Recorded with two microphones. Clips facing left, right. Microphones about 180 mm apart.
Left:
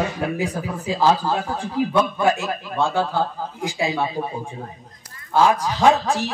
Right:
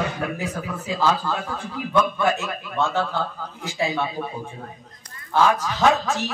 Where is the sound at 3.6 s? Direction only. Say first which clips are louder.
Left 2 dB; 10° left (ahead or behind).